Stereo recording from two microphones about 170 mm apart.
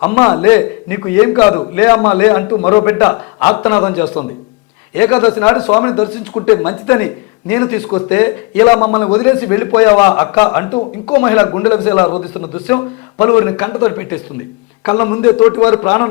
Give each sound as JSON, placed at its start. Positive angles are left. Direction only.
{"t": 0.2, "sound": "a man's voice", "side_deg": 35}
{"t": 0.4, "sound": "a man's voice", "side_deg": 10}